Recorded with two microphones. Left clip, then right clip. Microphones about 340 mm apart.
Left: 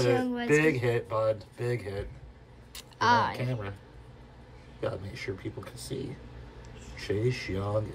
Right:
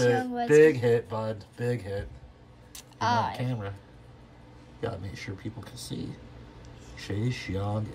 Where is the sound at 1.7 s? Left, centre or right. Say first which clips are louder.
Right 1 dB; right.